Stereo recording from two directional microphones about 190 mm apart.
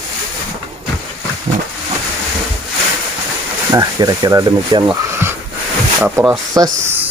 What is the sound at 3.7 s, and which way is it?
Speech, 20° right (ahead or behind).